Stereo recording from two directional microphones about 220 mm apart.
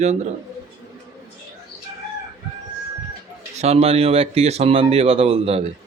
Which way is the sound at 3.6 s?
30° right (ahead or behind).